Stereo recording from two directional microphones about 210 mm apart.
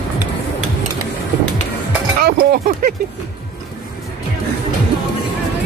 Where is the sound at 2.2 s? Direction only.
50° right (ahead or behind).